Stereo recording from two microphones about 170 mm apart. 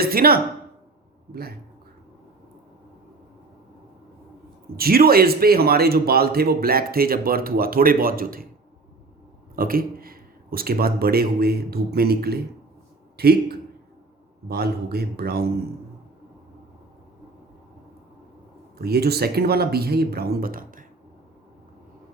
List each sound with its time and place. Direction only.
0.0 s a man's voice: 60° right (ahead or behind)
4.8 s a man's voice: 65° right (ahead or behind)
9.6 s a man's voice: 60° right (ahead or behind)
18.8 s speech: 70° right (ahead or behind)